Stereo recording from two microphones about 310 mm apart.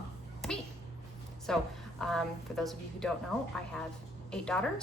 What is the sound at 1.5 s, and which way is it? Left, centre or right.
A woman's voice, centre.